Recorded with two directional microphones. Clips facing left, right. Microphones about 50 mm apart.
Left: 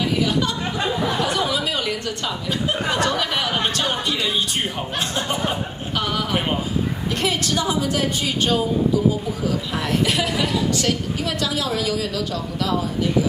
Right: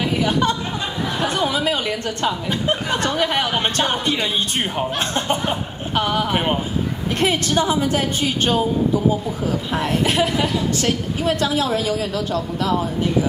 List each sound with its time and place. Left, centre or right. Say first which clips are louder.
0.2 s a sound: right 2 dB; right
5.9 s a woman's voice: right 3 dB; right
9.7 s a woman's voice: right 3 dB; right